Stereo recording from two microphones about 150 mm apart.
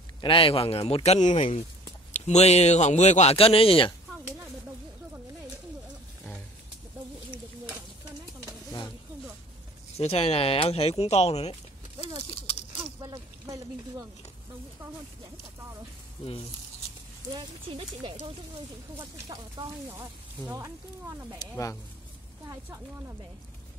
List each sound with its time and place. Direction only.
0.2 s a man's voice: 35° left (ahead or behind)
9.9 s a man's voice: 45° left (ahead or behind)
13.0 s a sound: 25° right (ahead or behind)
17.3 s speech: 35° right (ahead or behind)
18.9 s speech: 25° right (ahead or behind)
19.9 s speech: 15° right (ahead or behind)
21.4 s speech: 25° left (ahead or behind)
22.5 s speech: 15° right (ahead or behind)